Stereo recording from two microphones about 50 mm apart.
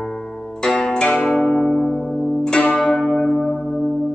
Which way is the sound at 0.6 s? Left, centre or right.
Centre.